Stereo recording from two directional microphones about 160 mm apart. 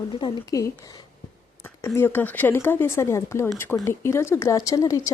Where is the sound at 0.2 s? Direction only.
25° left (ahead or behind).